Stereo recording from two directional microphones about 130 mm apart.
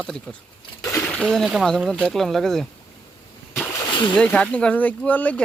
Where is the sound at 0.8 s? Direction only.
25° left (ahead or behind).